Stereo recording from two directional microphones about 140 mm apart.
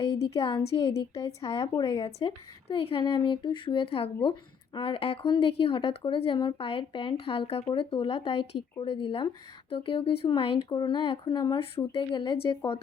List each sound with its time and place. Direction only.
0.0 s speech: 25° left (ahead or behind)
0.4 s speech: 35° left (ahead or behind)